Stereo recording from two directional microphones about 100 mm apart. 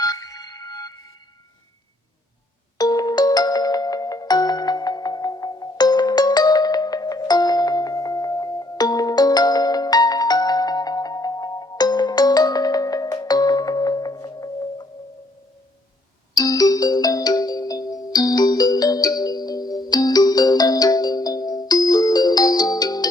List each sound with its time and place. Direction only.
0.0 s a sound: 40° left (ahead or behind)
2.7 s music: 40° left (ahead or behind)
16.3 s ringtone: 40° left (ahead or behind)